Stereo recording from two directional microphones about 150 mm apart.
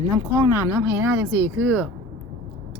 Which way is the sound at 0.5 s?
15° right (ahead or behind).